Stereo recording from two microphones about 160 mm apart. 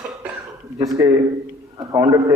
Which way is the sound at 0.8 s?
20° right (ahead or behind).